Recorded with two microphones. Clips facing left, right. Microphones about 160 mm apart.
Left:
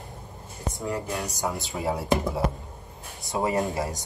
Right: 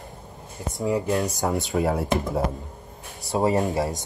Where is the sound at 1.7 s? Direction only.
70° right (ahead or behind).